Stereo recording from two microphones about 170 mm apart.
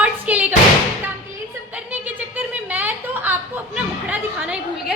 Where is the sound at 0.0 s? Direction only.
10° right (ahead or behind).